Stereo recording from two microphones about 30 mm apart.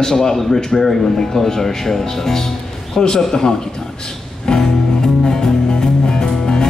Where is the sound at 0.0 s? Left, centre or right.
Centre.